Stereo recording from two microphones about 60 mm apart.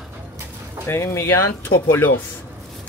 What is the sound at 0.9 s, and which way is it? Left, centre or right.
Speech, left.